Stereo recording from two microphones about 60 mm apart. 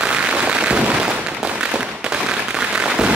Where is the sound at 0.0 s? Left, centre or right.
Centre.